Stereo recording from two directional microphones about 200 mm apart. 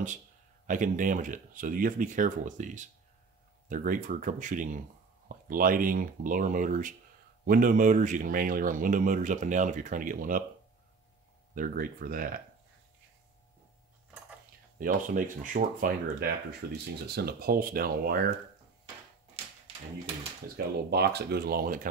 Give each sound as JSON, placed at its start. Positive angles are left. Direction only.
{"t": 0.7, "sound": "speech", "side_deg": -40}
{"t": 11.5, "sound": "speech", "side_deg": -45}
{"t": 14.8, "sound": "speech", "side_deg": -40}
{"t": 19.4, "sound": "a sound", "side_deg": -30}
{"t": 20.5, "sound": "speech", "side_deg": -55}